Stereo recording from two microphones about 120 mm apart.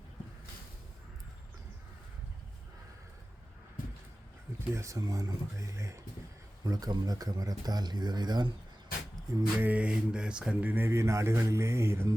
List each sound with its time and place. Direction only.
4.7 s speech: 25° right (ahead or behind)
9.6 s speech: 15° right (ahead or behind)